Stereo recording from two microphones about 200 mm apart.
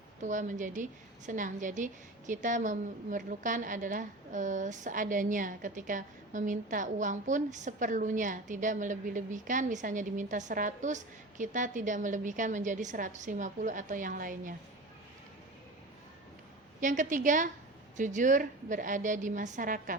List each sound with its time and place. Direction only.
0.2 s a woman's voice: 40° right (ahead or behind)
16.8 s a woman's voice: 40° right (ahead or behind)